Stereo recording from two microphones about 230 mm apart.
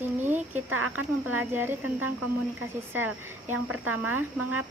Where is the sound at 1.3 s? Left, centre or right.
Centre.